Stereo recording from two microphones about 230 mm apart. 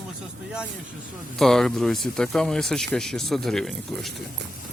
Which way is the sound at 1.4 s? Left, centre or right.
Centre.